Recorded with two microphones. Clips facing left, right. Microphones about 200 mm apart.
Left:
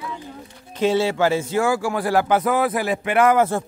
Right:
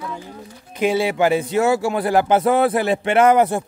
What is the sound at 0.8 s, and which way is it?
Speech, 15° right (ahead or behind).